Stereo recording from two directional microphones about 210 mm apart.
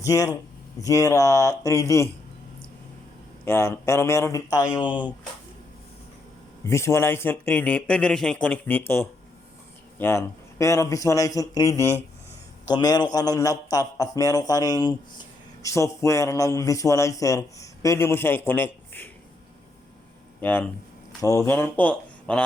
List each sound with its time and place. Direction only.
0.0 s speech: 15° left (ahead or behind)
3.4 s speech: 10° left (ahead or behind)
6.7 s speech: 15° left (ahead or behind)
20.4 s speech: 10° left (ahead or behind)